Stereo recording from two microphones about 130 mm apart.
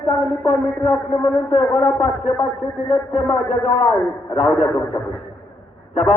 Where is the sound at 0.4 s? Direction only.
45° left (ahead or behind).